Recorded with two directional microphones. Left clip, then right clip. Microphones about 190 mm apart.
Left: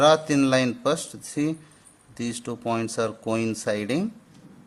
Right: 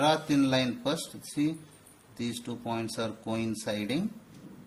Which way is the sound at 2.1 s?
45° left (ahead or behind).